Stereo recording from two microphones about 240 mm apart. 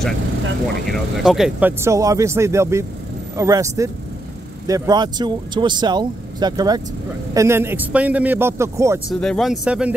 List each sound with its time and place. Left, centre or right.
0.8 s speech: centre
9.1 s speech: centre